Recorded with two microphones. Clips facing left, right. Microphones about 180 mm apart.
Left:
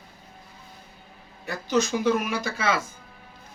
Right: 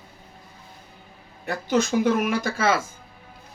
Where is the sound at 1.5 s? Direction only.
55° right (ahead or behind).